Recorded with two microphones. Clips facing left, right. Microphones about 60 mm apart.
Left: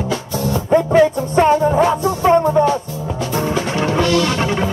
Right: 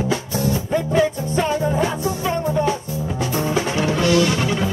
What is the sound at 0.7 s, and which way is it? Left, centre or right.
Music, left.